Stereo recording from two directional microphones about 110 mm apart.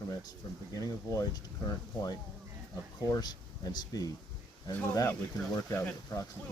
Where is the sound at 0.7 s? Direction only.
30° left (ahead or behind).